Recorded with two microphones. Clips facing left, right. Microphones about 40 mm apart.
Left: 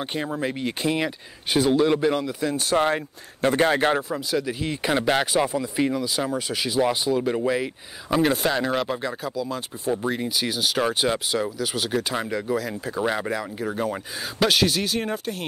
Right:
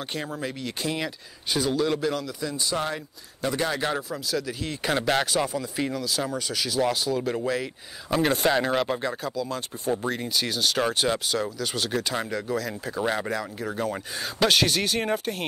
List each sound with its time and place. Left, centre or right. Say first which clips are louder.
0.0 s speech: left 4 dB; centre
2.5 s speech: left 7 dB; left
4.3 s speech: left 3 dB; centre
8.2 s speech: even; centre